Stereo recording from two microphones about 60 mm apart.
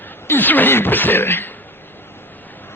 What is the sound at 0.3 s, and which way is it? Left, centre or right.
Speech, left.